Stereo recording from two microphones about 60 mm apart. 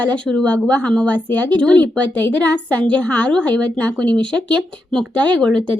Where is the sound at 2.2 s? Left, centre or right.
Left.